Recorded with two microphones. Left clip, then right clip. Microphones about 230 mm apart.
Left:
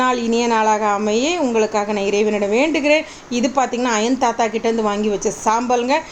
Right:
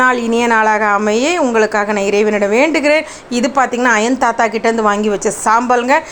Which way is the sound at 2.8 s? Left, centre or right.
Right.